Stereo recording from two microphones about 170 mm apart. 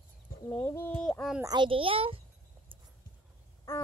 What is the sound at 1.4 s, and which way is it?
Speech, 25° right (ahead or behind).